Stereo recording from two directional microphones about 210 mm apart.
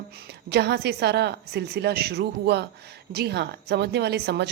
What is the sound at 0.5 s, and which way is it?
A woman's voice, 50° right (ahead or behind).